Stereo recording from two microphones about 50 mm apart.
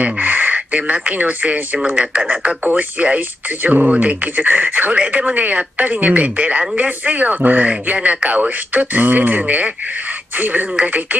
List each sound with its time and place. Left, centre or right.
0.0 s speech: right